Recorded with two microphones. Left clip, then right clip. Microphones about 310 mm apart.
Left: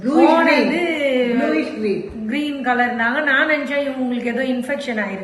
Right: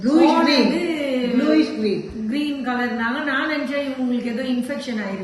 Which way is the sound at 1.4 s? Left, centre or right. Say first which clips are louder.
Right 1 dB; right.